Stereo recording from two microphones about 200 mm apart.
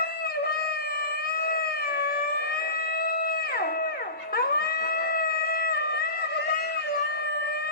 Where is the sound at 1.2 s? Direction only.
50° left (ahead or behind).